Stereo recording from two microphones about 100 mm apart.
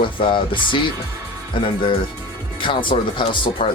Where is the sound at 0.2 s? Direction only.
55° left (ahead or behind).